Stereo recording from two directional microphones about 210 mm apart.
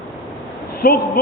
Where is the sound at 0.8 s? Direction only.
45° left (ahead or behind).